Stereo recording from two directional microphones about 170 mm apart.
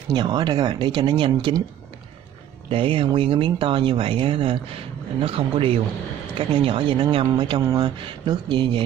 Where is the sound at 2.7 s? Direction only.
30° right (ahead or behind).